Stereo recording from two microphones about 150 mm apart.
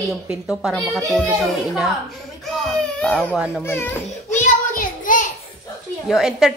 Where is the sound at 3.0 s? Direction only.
5° left (ahead or behind).